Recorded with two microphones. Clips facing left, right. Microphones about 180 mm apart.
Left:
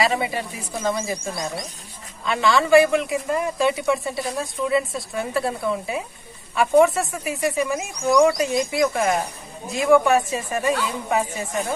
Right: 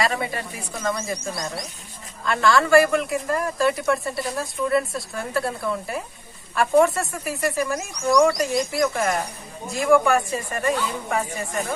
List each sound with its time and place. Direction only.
0.3 s a woman's voice: centre (ahead or behind)
10.6 s a woman's voice: 20° left (ahead or behind)